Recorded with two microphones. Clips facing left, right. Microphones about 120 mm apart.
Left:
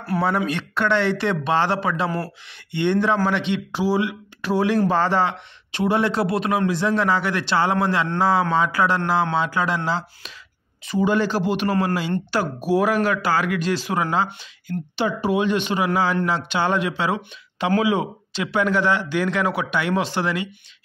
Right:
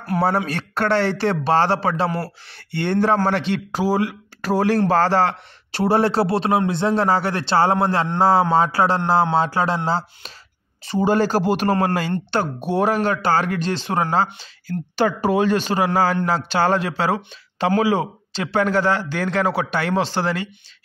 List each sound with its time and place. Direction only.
0.5 s speech: 40° right (ahead or behind)
12.1 s speech: 25° right (ahead or behind)